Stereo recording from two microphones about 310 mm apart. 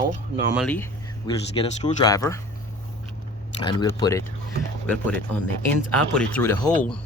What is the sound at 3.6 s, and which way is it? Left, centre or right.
Speech, centre.